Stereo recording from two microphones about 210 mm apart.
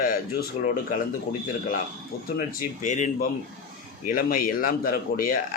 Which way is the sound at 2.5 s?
40° left (ahead or behind).